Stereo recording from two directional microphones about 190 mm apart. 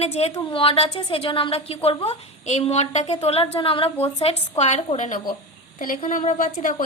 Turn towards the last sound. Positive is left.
turn(degrees=45)  # may be behind; listen again after turning